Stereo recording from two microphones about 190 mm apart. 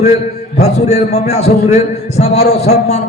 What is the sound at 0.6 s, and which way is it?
A man's voice, 35° left (ahead or behind).